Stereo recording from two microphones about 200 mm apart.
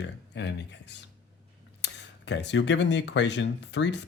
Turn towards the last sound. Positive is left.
turn(degrees=60)  # may be behind; listen again after turning